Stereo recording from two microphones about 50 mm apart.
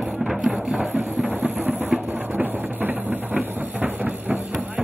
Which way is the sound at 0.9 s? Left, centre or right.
Right.